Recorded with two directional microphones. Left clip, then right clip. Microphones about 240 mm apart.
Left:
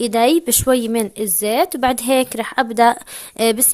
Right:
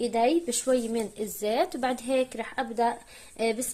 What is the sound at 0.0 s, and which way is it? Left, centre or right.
Speech, left.